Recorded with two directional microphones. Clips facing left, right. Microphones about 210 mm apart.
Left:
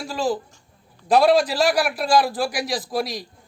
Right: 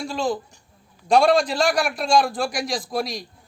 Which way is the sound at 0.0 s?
5° left (ahead or behind).